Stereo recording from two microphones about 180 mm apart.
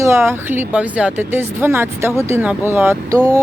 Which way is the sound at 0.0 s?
15° right (ahead or behind).